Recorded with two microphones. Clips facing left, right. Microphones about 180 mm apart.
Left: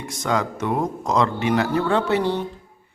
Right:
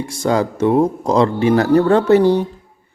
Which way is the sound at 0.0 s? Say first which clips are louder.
Right 6 dB; 30° right (ahead or behind).